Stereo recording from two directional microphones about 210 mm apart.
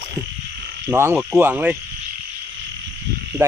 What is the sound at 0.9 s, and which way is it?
Frog, 10° right (ahead or behind).